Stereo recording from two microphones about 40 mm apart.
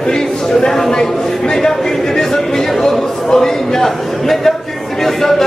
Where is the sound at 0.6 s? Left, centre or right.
Centre.